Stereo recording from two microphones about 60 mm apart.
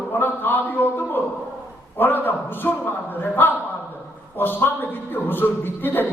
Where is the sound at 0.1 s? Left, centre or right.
Left.